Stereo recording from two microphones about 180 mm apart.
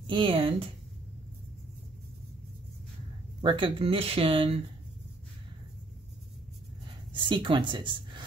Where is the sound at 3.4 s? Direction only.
30° right (ahead or behind).